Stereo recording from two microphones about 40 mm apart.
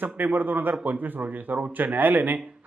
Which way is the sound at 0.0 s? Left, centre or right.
Right.